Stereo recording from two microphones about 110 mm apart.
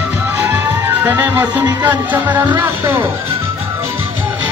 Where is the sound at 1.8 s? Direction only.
15° right (ahead or behind).